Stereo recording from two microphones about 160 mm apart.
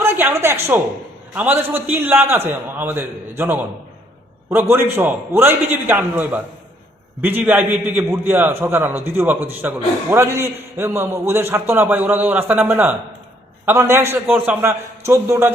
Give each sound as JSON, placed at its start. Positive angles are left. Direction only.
{"t": 0.0, "sound": "a man's voice", "side_deg": -15}